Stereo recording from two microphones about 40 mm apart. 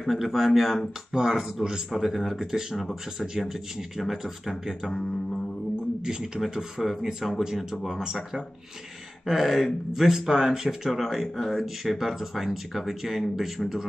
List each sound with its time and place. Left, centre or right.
0.0 s speech: centre
1.1 s speech: centre
3.2 s speech: centre
6.0 s speech: centre
6.5 s speech: centre
7.0 s speech: centre
10.9 s speech: centre